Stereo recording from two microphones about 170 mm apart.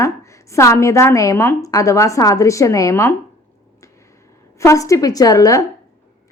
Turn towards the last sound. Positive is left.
turn(degrees=20)  # may be behind; listen again after turning